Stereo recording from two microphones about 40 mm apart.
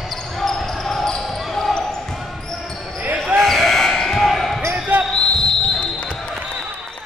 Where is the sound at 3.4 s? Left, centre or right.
Centre.